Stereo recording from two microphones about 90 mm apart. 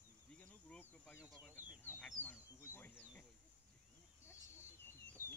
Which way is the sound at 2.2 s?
25° left (ahead or behind).